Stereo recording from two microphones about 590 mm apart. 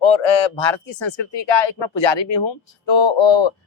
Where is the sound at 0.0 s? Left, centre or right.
Left.